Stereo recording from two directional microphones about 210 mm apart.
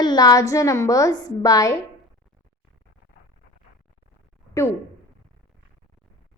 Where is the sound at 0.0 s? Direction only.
20° left (ahead or behind).